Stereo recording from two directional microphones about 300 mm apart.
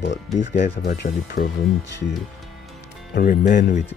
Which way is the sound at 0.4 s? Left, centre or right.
Left.